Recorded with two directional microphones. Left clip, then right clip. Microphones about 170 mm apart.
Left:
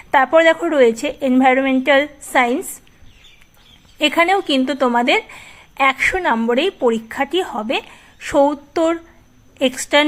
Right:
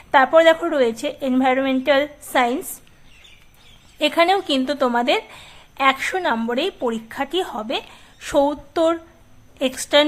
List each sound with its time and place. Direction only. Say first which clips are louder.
0.1 s a woman's voice: left 1 dB; 15° left (ahead or behind)
3.9 s a woman's voice: left 2 dB; 15° left (ahead or behind)